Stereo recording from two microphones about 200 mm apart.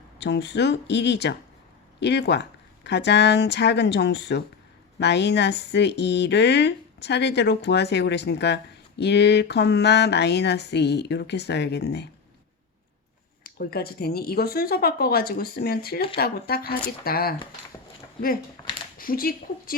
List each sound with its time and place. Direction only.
0.2 s speech: 60° left (ahead or behind)
13.4 s speech: 50° left (ahead or behind)
18.9 s speech: 45° left (ahead or behind)